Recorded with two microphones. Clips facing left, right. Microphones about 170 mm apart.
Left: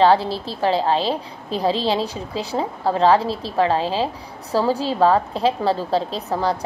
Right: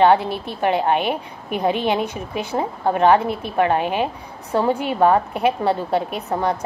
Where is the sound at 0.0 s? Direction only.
20° right (ahead or behind).